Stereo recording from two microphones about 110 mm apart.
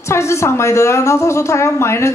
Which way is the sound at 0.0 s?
25° left (ahead or behind).